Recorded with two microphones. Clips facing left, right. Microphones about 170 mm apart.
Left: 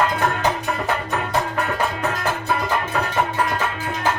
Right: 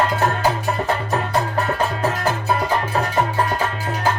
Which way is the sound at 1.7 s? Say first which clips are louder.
Right 2 dB; 35° right (ahead or behind).